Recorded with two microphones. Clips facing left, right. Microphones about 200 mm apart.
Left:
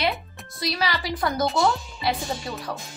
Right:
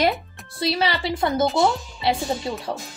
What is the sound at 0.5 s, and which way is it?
Speech, 30° right (ahead or behind).